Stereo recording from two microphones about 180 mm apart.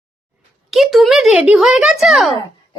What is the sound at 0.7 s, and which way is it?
A woman's voice, centre (ahead or behind).